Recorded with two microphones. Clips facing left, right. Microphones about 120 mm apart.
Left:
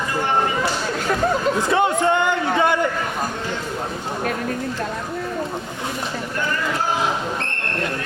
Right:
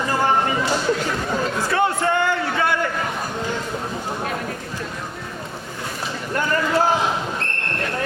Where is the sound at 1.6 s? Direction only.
20° left (ahead or behind).